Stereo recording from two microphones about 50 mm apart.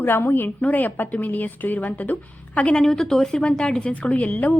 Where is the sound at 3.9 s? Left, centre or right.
Left.